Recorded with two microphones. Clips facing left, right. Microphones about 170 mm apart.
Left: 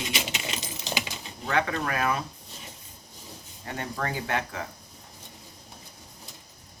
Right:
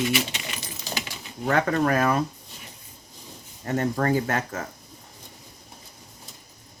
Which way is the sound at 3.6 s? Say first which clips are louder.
Right 9 dB; 45° right (ahead or behind).